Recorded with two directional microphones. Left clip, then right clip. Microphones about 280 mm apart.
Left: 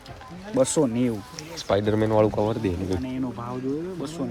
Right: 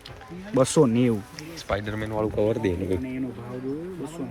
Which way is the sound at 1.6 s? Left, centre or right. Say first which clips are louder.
Left 7 dB; centre.